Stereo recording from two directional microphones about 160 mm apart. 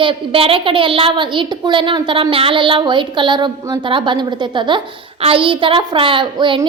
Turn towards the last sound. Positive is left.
turn(degrees=-30)  # may be behind; listen again after turning